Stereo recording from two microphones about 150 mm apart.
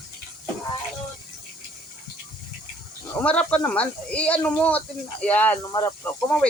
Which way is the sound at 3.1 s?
10° left (ahead or behind).